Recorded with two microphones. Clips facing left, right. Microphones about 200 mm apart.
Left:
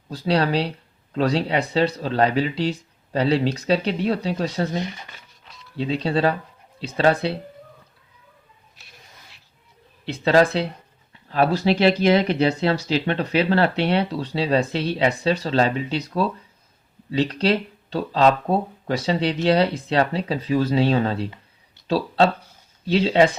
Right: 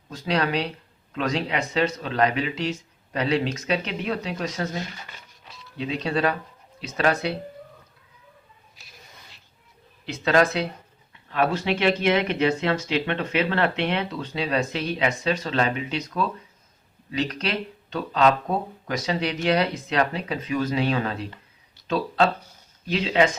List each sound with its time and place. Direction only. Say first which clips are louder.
0.1 s speech: left 4 dB; 35° left (ahead or behind)
10.1 s speech: left 3 dB; 30° left (ahead or behind)